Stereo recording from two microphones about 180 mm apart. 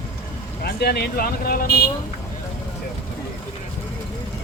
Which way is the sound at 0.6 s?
60° left (ahead or behind).